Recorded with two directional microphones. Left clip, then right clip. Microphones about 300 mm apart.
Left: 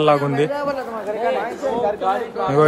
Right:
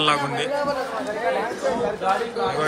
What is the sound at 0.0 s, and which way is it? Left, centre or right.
Speech, centre.